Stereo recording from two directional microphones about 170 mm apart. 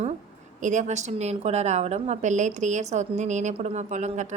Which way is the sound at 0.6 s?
45° right (ahead or behind).